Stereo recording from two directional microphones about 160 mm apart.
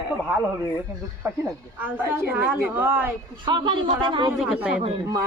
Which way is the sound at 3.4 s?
30° right (ahead or behind).